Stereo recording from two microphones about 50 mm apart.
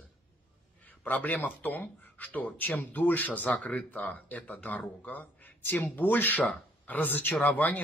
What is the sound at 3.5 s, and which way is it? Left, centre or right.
Speech, left.